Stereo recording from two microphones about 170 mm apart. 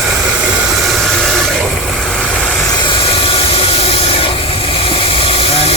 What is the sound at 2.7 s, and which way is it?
Vehicle, 30° left (ahead or behind).